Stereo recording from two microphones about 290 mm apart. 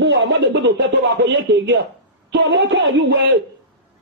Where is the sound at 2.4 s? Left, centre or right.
Right.